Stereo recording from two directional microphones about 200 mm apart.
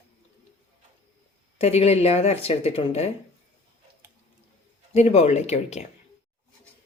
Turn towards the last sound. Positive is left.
turn(degrees=35)  # may be behind; listen again after turning